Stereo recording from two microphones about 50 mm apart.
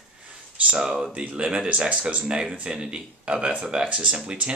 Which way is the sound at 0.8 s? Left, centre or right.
Centre.